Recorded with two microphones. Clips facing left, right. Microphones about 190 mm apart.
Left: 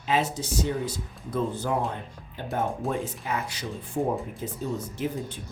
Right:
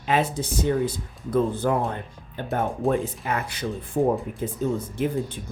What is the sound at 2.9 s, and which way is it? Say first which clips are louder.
Speech: right 5 dB; 60° right (ahead or behind).